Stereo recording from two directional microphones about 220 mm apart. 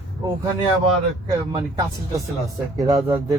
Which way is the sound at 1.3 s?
15° right (ahead or behind).